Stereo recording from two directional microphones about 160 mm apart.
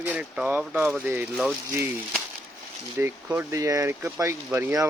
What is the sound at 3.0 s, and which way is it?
Speech, 15° right (ahead or behind).